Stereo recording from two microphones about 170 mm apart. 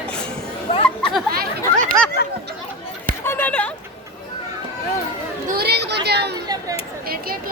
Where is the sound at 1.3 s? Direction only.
60° right (ahead or behind).